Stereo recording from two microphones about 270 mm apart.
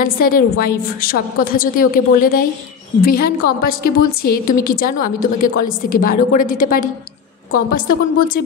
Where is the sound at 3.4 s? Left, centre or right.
Left.